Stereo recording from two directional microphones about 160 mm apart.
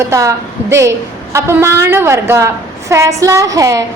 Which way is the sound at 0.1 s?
20° right (ahead or behind).